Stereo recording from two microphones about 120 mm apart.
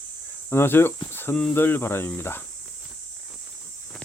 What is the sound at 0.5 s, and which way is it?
Speech, 20° left (ahead or behind).